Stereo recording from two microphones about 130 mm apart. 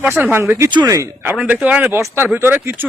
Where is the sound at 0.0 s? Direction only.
15° right (ahead or behind).